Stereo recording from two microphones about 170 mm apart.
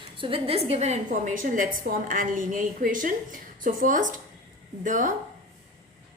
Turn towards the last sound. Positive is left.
turn(degrees=-50)  # may be behind; listen again after turning